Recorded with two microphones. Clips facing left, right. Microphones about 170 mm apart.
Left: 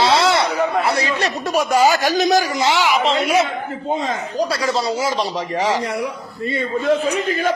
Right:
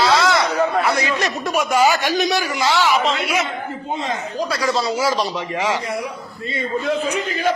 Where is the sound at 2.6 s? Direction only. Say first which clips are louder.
Even; 20° left (ahead or behind).